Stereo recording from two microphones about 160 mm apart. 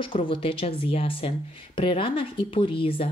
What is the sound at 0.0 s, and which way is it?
Speech, 30° left (ahead or behind).